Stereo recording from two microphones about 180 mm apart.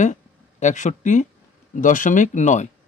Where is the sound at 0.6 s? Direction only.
40° left (ahead or behind).